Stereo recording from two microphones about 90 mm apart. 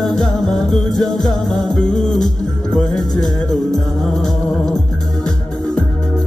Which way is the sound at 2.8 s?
45° left (ahead or behind).